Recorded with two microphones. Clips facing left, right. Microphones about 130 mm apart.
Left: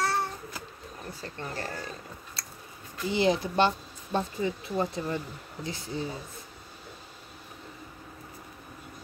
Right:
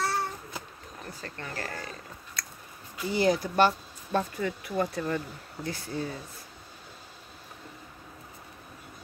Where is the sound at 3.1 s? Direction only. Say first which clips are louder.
Even; 25° left (ahead or behind).